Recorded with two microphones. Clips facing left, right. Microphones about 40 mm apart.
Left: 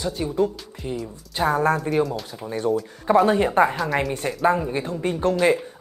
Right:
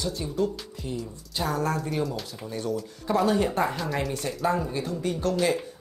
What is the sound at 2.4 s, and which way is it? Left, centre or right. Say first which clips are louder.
Speech: left 8 dB; left.